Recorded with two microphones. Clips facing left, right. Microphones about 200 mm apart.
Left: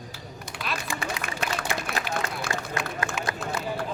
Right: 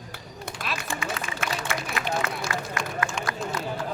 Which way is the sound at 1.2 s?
60° left (ahead or behind).